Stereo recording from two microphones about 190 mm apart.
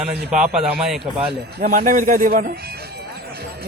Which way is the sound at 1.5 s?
45° right (ahead or behind).